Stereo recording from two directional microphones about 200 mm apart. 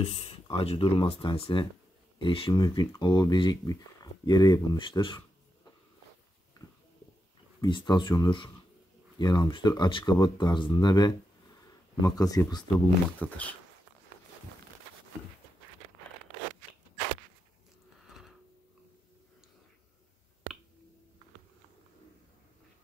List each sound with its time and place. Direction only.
0.0 s speech: 30° left (ahead or behind)
7.6 s speech: 20° left (ahead or behind)
12.7 s speech: 10° left (ahead or behind)